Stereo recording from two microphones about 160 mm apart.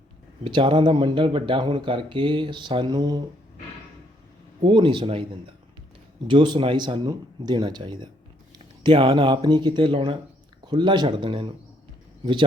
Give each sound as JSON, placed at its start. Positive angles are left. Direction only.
{"t": 0.4, "sound": "speech", "side_deg": -35}
{"t": 4.6, "sound": "speech", "side_deg": -30}
{"t": 6.2, "sound": "speech", "side_deg": -30}